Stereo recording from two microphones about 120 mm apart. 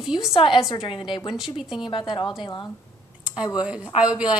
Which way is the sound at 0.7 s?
45° left (ahead or behind).